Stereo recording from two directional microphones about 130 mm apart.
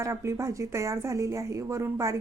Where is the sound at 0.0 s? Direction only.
25° right (ahead or behind).